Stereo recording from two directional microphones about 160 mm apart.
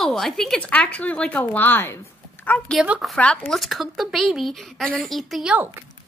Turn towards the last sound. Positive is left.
turn(degrees=-10)  # may be behind; listen again after turning